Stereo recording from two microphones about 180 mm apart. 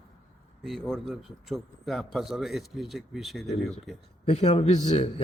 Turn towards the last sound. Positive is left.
turn(degrees=35)  # may be behind; listen again after turning